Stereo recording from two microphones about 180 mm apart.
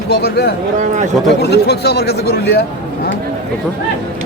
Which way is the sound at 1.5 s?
65° left (ahead or behind).